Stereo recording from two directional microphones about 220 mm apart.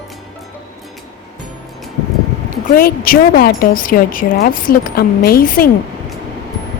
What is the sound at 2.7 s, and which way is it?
Speech, 40° left (ahead or behind).